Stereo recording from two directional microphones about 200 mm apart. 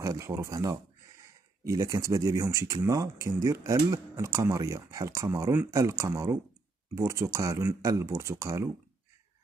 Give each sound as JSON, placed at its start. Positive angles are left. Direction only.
{"t": 0.0, "sound": "speech", "side_deg": -15}